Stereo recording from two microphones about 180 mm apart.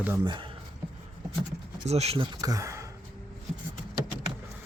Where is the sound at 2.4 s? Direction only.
15° right (ahead or behind).